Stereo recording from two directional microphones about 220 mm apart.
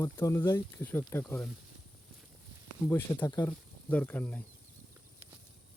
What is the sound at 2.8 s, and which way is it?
Speech, 10° left (ahead or behind).